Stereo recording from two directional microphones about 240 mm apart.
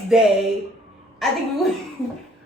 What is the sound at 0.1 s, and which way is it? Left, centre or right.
A woman's voice, centre.